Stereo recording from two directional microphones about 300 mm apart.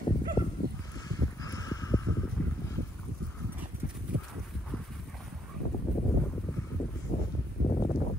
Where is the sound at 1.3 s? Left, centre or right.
Centre.